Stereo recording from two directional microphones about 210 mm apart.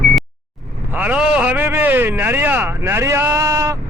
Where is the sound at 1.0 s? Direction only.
5° right (ahead or behind).